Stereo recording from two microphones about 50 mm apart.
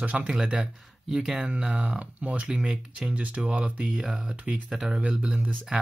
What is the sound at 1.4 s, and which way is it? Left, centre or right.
Speech, right.